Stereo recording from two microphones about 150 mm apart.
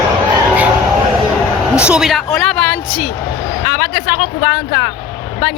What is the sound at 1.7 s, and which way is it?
Speech, 5° right (ahead or behind).